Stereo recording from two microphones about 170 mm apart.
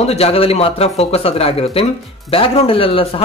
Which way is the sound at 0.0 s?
35° left (ahead or behind).